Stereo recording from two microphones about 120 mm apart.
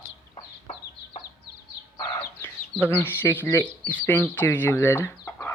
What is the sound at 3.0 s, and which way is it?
Speech, 20° left (ahead or behind).